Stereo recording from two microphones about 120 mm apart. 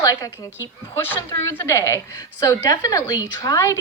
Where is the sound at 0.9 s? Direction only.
20° left (ahead or behind).